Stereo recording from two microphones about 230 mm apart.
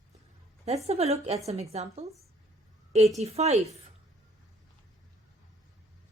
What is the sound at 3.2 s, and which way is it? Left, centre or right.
Speech, right.